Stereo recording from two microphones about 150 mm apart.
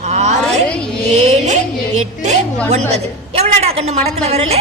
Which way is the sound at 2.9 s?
45° right (ahead or behind).